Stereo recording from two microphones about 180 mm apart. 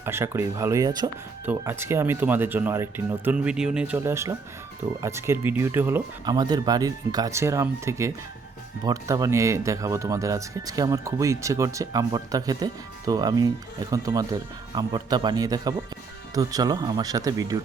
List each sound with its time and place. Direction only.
0.0 s speech: 15° right (ahead or behind)
6.2 s speech: 20° right (ahead or behind)